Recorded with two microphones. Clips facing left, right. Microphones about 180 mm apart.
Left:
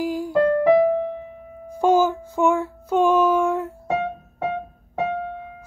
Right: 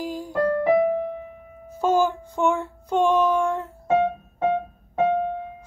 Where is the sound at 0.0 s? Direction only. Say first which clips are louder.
Left 5 dB; 10° left (ahead or behind).